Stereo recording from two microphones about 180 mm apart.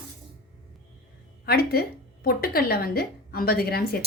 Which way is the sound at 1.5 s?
60° left (ahead or behind).